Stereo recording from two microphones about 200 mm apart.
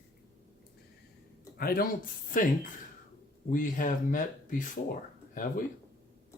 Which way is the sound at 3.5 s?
40° left (ahead or behind).